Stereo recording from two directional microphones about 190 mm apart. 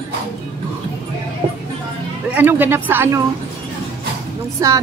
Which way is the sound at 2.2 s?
10° right (ahead or behind).